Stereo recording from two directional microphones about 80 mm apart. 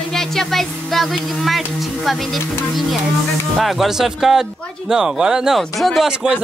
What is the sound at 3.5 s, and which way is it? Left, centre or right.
Speech, centre.